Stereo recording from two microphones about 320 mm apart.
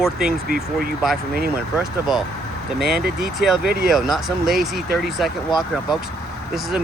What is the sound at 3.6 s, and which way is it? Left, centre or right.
Speech, right.